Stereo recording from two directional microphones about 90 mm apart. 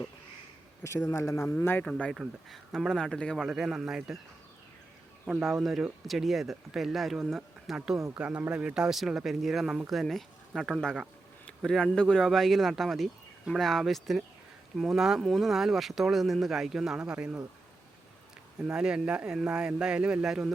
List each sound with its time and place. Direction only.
0.9 s speech: 30° left (ahead or behind)
1.8 s speech: 5° left (ahead or behind)
5.6 s speech: centre (ahead or behind)
8.1 s speech: 15° right (ahead or behind)
18.6 s speech: 10° right (ahead or behind)